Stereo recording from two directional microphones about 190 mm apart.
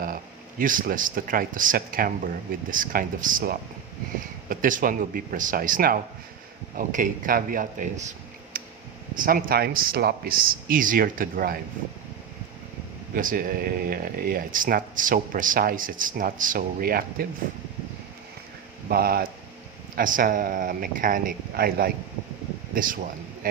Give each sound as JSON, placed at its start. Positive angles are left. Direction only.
{"t": 0.6, "sound": "speech", "side_deg": -45}
{"t": 8.5, "sound": "a sound", "side_deg": -50}
{"t": 9.1, "sound": "speech", "side_deg": -50}
{"t": 13.1, "sound": "speech", "side_deg": -50}
{"t": 18.9, "sound": "speech", "side_deg": -55}